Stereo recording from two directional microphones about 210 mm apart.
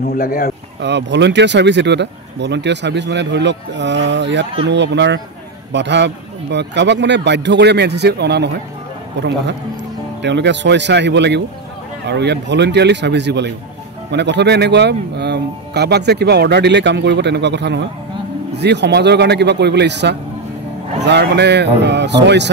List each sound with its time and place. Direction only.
0.2 s speech: 45° left (ahead or behind)
0.7 s speech: 55° right (ahead or behind)
10.2 s a man's voice: 55° right (ahead or behind)